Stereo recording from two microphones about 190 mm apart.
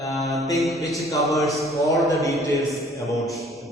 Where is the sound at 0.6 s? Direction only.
Centre (ahead or behind).